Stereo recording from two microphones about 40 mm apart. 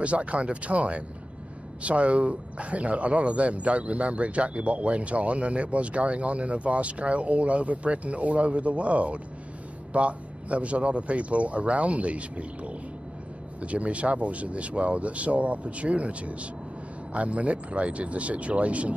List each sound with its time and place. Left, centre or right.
0.0 s speech: right